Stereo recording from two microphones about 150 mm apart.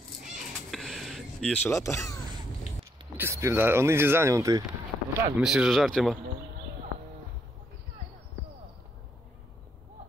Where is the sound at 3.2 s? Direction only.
20° right (ahead or behind).